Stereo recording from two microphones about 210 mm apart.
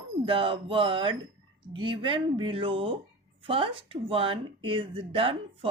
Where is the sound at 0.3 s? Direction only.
25° right (ahead or behind).